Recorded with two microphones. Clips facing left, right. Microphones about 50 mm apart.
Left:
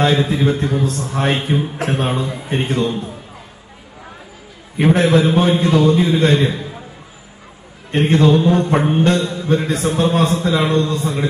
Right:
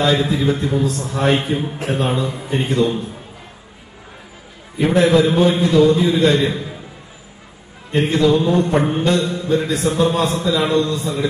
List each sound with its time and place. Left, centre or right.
0.0 s a man's voice: left
1.8 s a man's voice: left
2.0 s a man's voice: left
4.7 s a man's voice: left
7.9 s mantra: left
8.5 s a man's voice: left